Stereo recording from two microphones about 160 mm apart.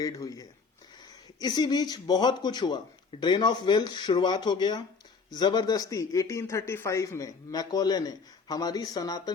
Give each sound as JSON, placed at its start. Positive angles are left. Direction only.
{"t": 0.0, "sound": "speech", "side_deg": 20}